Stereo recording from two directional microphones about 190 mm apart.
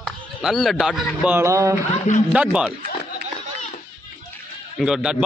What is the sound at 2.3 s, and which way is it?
Speech, 5° right (ahead or behind).